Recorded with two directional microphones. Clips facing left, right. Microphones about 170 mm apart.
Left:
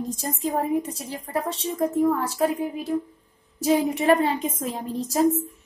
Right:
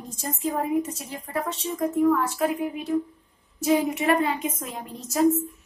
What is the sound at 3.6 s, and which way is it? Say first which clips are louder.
A woman's voice: left 1 dB; 35° left (ahead or behind).